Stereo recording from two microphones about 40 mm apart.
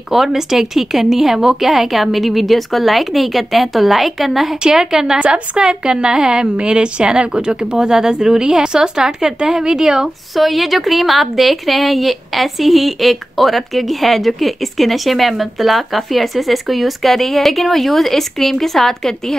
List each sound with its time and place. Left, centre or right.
0.1 s a woman's voice: centre
4.6 s speech: centre
5.2 s a woman's voice: right
10.3 s a woman's voice: centre